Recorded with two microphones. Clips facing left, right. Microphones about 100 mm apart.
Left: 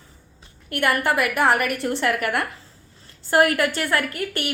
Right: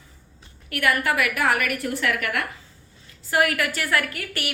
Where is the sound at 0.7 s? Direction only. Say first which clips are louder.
Left 2 dB; 30° left (ahead or behind).